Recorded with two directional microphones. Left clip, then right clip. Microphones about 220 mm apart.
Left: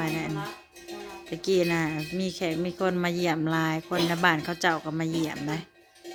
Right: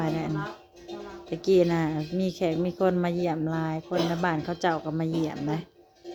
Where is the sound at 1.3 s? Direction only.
5° right (ahead or behind).